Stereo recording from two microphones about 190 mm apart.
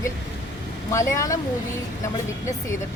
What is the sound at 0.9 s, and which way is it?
Speech, 15° left (ahead or behind).